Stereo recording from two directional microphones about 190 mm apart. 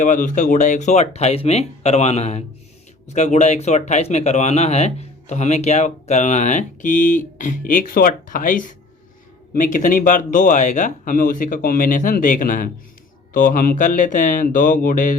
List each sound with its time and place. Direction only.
0.0 s speech: 40° left (ahead or behind)